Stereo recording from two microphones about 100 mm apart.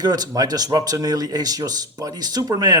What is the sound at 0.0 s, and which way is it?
Speech, 40° right (ahead or behind).